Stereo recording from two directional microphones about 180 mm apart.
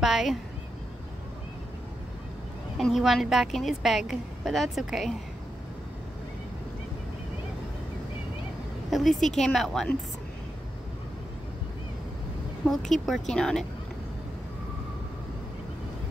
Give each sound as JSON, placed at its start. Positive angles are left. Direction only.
{"t": 0.0, "sound": "a woman's voice", "side_deg": 0}
{"t": 2.8, "sound": "a woman's voice", "side_deg": 0}
{"t": 8.9, "sound": "a woman's voice", "side_deg": 0}
{"t": 12.6, "sound": "a woman's voice", "side_deg": 0}